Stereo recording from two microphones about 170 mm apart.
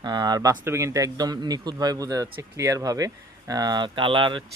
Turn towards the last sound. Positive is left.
turn(degrees=-30)  # may be behind; listen again after turning